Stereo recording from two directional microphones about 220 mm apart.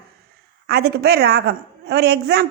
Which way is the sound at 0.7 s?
45° right (ahead or behind).